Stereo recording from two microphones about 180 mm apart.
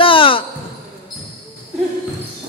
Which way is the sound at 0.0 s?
30° left (ahead or behind).